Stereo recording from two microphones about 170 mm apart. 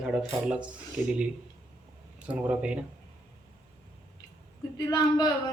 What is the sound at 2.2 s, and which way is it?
Speech, 5° right (ahead or behind).